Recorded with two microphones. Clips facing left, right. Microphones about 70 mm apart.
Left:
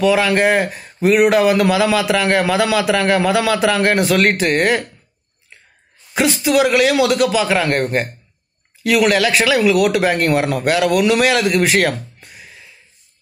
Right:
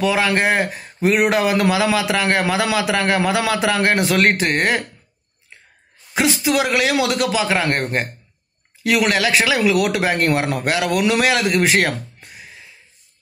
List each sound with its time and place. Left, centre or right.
0.0 s a man's voice: right
6.1 s a man's voice: right